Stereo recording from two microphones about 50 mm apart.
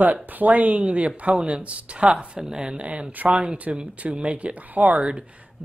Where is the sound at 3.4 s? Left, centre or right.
Right.